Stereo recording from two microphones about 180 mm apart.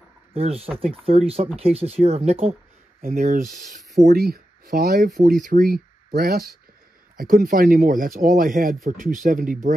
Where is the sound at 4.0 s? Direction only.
60° right (ahead or behind).